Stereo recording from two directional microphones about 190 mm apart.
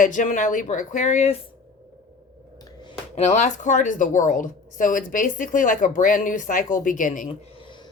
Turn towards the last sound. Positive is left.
turn(degrees=45)  # may be behind; listen again after turning